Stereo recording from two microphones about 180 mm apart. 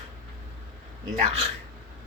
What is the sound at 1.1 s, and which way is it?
Speech, 35° right (ahead or behind).